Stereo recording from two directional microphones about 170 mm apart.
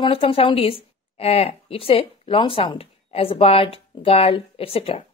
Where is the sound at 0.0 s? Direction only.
35° left (ahead or behind).